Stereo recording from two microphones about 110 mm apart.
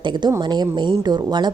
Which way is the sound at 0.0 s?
45° right (ahead or behind).